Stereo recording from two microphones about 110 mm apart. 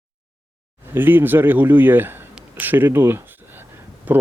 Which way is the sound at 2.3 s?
15° right (ahead or behind).